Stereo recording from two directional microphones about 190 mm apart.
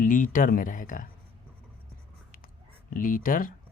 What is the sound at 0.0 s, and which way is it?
Speech, 45° left (ahead or behind).